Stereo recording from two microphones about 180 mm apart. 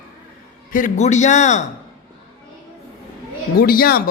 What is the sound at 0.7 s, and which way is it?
Speech, 45° left (ahead or behind).